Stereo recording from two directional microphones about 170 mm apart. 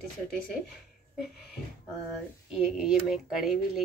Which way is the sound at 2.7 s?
5° right (ahead or behind).